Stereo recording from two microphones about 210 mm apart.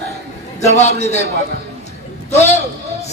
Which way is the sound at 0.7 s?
30° left (ahead or behind).